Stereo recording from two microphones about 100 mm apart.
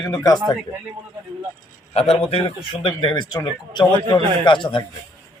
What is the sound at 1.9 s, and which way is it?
Speech, 90° left.